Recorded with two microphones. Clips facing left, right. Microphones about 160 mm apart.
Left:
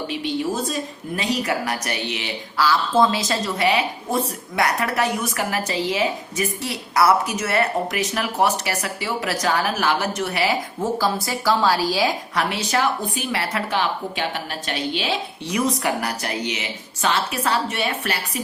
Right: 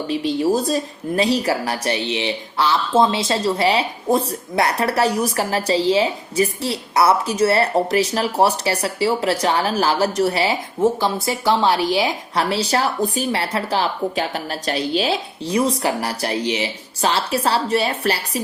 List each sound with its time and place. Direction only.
0.1 s a woman's voice: 35° right (ahead or behind)